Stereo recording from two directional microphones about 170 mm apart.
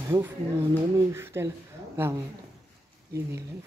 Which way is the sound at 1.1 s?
15° right (ahead or behind).